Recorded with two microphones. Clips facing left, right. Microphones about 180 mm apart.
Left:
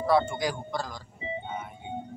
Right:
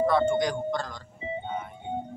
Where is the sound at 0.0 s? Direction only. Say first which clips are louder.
Right 2 dB; 10° left (ahead or behind).